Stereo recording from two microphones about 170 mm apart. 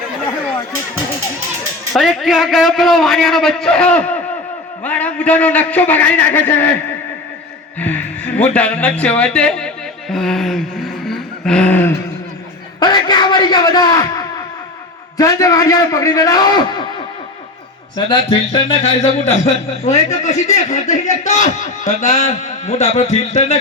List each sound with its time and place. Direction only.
1.9 s a man's voice: centre (ahead or behind)
7.8 s speech: 10° left (ahead or behind)
12.8 s a man's voice: 25° left (ahead or behind)
17.9 s a man's voice: 30° left (ahead or behind)